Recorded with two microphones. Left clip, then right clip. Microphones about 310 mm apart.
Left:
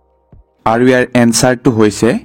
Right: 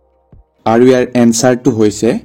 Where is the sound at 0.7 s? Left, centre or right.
Left.